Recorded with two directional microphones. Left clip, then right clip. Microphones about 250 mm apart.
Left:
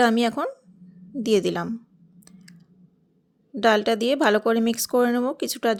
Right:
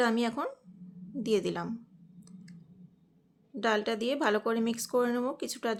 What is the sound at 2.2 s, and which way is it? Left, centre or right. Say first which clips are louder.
Clicking: left 4 dB; left.